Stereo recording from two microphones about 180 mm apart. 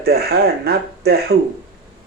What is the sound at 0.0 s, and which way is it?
Speech, 60° right (ahead or behind).